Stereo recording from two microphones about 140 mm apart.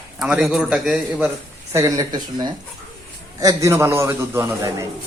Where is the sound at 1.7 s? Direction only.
25° right (ahead or behind).